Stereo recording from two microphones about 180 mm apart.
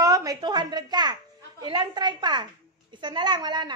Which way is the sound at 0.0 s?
20° right (ahead or behind).